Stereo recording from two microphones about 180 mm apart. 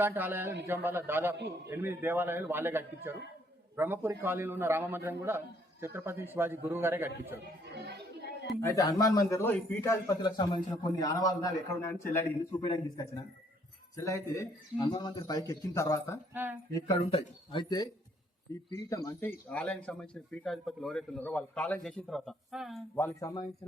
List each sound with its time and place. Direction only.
0.0 s a man's voice: 10° right (ahead or behind)
7.6 s speech: 70° right (ahead or behind)
8.6 s speech: 20° left (ahead or behind)
10.2 s a man's voice: 25° left (ahead or behind)
16.3 s a man's voice: 10° right (ahead or behind)
16.7 s a man's voice: 20° left (ahead or behind); by 22.8 s centre (ahead or behind)
23.0 s speech: 10° left (ahead or behind)